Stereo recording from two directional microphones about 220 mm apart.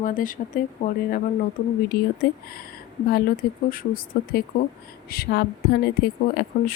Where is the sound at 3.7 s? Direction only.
40° left (ahead or behind).